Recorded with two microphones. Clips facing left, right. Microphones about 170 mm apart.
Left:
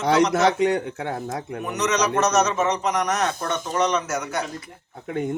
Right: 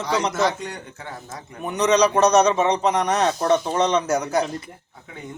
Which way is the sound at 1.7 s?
30° right (ahead or behind).